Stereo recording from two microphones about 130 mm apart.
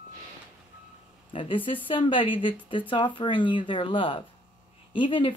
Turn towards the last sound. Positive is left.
turn(degrees=40)  # may be behind; listen again after turning